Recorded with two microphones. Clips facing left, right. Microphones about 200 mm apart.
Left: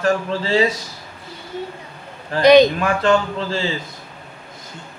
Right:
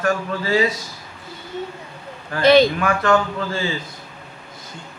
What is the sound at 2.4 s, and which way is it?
A man's voice, 20° left (ahead or behind).